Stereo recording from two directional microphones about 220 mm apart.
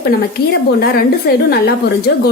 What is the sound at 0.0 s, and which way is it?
A woman's voice, 45° left (ahead or behind).